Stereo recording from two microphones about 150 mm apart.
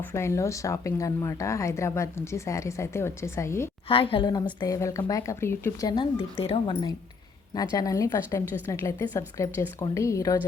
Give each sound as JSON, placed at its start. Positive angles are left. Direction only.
{"t": 0.0, "sound": "speech", "side_deg": 20}
{"t": 3.8, "sound": "speech", "side_deg": 35}
{"t": 5.9, "sound": "speech", "side_deg": 35}
{"t": 7.5, "sound": "a woman's voice", "side_deg": 25}